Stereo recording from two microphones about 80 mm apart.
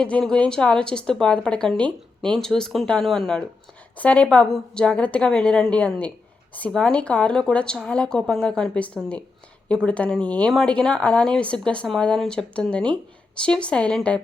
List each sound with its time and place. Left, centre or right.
0.0 s a woman's voice: centre
3.9 s a woman's voice: centre